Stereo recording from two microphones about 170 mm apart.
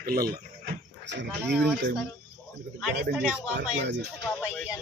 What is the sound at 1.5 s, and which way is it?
Speech, centre (ahead or behind).